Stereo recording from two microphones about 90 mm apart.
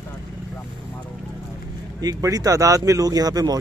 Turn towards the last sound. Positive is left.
turn(degrees=-45)  # may be behind; listen again after turning